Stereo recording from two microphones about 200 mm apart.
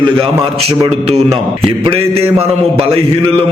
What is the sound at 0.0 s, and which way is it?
A man's voice, 25° right (ahead or behind).